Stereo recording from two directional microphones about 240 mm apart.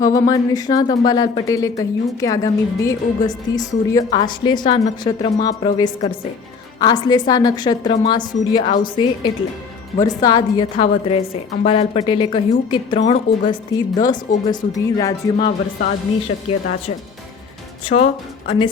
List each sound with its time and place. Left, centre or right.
0.0 s a woman's voice: centre
15.4 s speech: left
16.5 s a woman's voice: left